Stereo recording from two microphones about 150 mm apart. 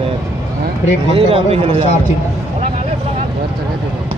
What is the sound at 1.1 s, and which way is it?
Speech, 40° right (ahead or behind).